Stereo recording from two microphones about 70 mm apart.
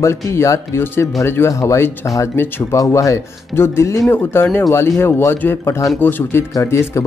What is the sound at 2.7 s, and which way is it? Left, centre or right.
Speech, left.